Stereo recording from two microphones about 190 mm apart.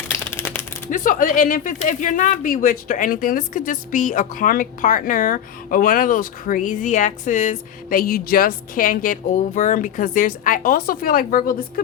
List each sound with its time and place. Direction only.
0.1 s typewriter: 10° left (ahead or behind)
0.9 s speech: 45° left (ahead or behind)